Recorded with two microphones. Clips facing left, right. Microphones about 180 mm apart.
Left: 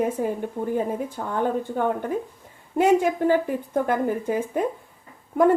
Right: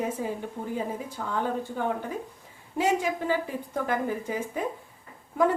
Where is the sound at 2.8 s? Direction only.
55° left (ahead or behind).